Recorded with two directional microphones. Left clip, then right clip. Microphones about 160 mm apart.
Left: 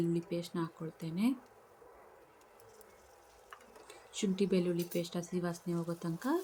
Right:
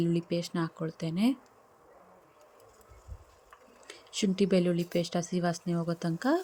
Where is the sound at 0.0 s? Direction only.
40° right (ahead or behind).